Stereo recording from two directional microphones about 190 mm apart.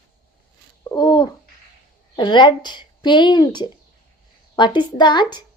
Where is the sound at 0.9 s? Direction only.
20° left (ahead or behind).